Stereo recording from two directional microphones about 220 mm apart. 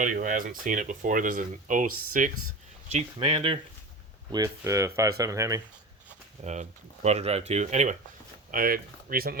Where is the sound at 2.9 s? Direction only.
25° right (ahead or behind).